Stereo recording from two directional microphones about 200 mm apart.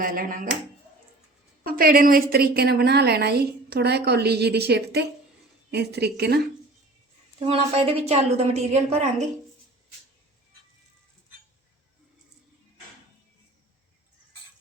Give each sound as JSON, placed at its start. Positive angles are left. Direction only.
{"t": 0.0, "sound": "a woman's voice", "side_deg": -45}
{"t": 1.6, "sound": "a woman's voice", "side_deg": -45}
{"t": 7.3, "sound": "a woman's voice", "side_deg": -30}